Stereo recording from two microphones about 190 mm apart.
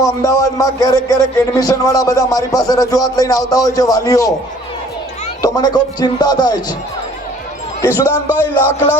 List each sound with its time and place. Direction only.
0.0 s speech: 20° left (ahead or behind)
5.4 s speech: 20° left (ahead or behind)
7.9 s a man's voice: 10° right (ahead or behind)